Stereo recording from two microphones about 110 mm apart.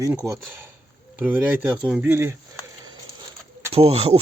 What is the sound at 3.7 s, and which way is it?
Speech, 65° right (ahead or behind).